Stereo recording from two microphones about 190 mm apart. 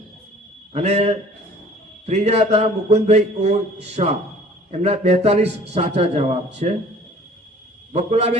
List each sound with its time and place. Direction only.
0.7 s a man's voice: 35° right (ahead or behind)
7.9 s a man's voice: 35° right (ahead or behind)